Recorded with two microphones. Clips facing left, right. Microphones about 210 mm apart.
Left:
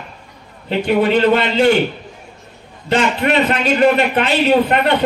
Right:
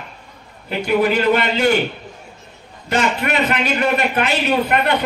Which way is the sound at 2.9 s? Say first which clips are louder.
Left 4 dB; 30° left (ahead or behind).